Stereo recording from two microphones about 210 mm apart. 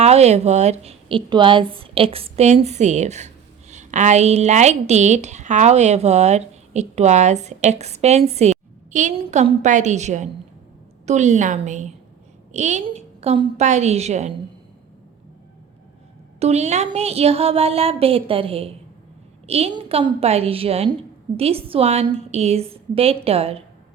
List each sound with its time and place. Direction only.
0.0 s a woman's voice: 30° right (ahead or behind)
16.4 s a woman's voice: 30° right (ahead or behind)